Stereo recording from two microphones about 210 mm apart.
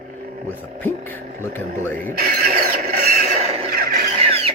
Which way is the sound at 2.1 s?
45° right (ahead or behind).